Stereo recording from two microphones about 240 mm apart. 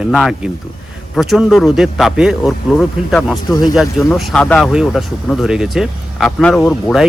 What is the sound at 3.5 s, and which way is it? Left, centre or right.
Speech, centre.